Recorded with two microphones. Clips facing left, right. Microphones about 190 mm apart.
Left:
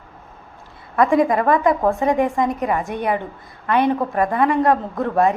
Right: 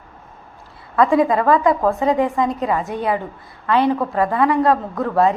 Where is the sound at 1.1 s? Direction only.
20° left (ahead or behind).